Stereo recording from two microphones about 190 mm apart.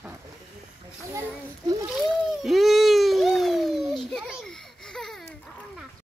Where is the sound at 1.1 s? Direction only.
15° right (ahead or behind).